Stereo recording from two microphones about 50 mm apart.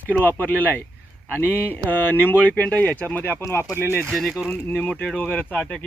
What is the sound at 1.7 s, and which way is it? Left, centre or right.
Speech, left.